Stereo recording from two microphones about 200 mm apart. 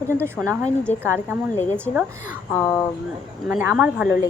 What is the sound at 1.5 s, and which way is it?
Speech, 10° left (ahead or behind).